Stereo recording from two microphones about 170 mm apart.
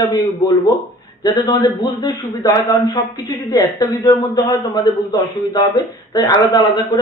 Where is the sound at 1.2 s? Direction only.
25° left (ahead or behind).